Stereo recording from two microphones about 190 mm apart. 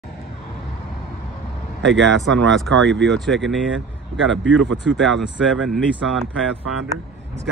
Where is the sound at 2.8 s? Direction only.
Centre (ahead or behind).